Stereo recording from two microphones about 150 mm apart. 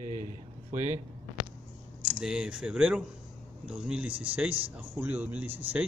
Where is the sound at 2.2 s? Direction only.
5° right (ahead or behind).